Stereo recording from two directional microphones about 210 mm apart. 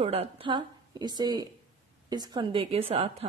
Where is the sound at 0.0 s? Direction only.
30° right (ahead or behind).